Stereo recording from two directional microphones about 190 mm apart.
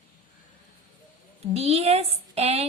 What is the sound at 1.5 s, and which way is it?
A woman's voice, 35° right (ahead or behind).